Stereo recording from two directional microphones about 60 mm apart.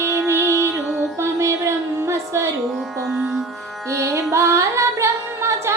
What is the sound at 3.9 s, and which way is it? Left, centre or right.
Music, right.